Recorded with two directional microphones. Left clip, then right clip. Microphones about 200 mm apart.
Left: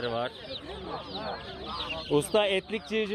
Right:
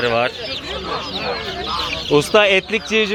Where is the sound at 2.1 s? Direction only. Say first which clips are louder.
Right 12 dB; 10° left (ahead or behind).